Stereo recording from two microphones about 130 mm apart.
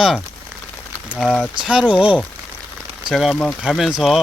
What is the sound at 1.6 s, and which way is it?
Speech, 5° right (ahead or behind).